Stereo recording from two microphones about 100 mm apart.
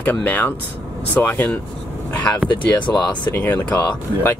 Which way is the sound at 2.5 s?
50° left (ahead or behind).